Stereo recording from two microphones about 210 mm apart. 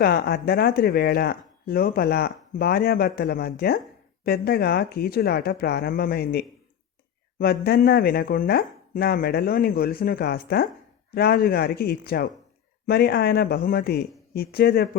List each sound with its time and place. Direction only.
0.0 s speech: 50° left (ahead or behind)